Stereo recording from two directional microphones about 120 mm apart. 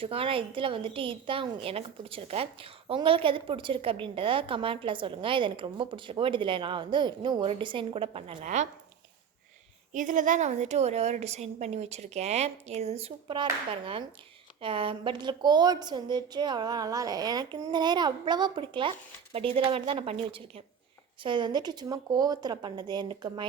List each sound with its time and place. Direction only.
0.0 s a woman's voice: 50° right (ahead or behind)
8.4 s speech: 90° right
9.9 s a woman's voice: 90° right; by 13.3 s 55° right (ahead or behind)
13.3 s a woman's voice: 45° right (ahead or behind)